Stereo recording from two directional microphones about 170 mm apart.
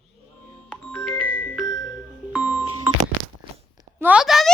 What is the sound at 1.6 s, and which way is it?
Music, 20° left (ahead or behind).